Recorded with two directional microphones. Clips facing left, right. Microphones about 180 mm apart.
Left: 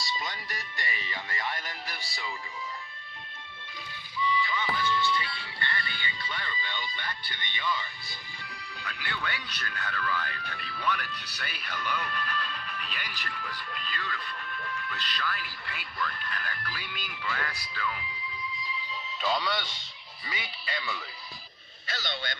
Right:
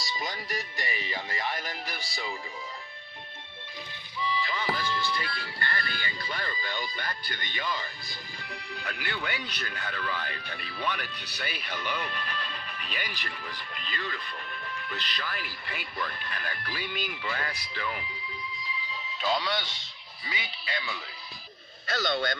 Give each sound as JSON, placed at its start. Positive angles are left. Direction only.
{"t": 0.8, "sound": "speech", "side_deg": -25}
{"t": 4.2, "sound": "music", "side_deg": -35}
{"t": 9.2, "sound": "speech", "side_deg": -20}
{"t": 19.2, "sound": "speech", "side_deg": 0}
{"t": 21.8, "sound": "a man's voice", "side_deg": -45}